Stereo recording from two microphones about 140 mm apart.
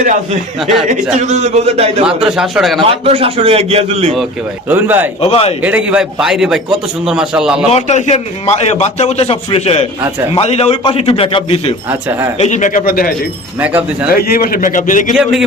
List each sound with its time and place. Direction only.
0.0 s a man's voice: 65° right (ahead or behind)
0.6 s a man's voice: centre (ahead or behind)
1.2 s a man's voice: 55° right (ahead or behind)
2.0 s a man's voice: 5° right (ahead or behind)
2.8 s a man's voice: 45° right (ahead or behind)
4.7 s speech: 15° right (ahead or behind)
5.2 s a man's voice: 45° left (ahead or behind)
5.6 s a man's voice: 10° right (ahead or behind)
7.7 s a man's voice: 55° left (ahead or behind)
11.9 s speech: 15° right (ahead or behind)
12.4 s speech: 60° left (ahead or behind); by 13.1 s 90° left
13.6 s speech: 10° right (ahead or behind)
14.1 s a man's voice: 90° left; by 15.1 s 70° left (ahead or behind)
15.1 s a man's voice: 5° right (ahead or behind)